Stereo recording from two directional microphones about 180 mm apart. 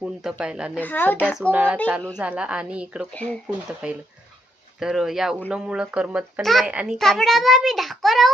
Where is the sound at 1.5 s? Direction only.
10° right (ahead or behind).